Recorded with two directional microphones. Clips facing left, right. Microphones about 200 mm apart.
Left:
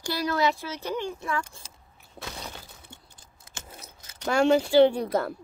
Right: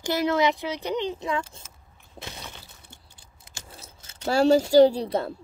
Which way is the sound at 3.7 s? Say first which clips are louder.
Even; 25° right (ahead or behind).